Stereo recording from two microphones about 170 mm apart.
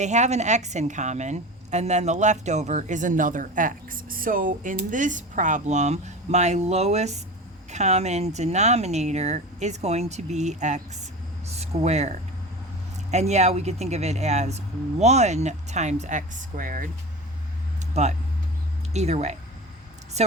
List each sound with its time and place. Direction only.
0.0 s a woman's voice: 45° right (ahead or behind)
18.0 s speech: 40° right (ahead or behind)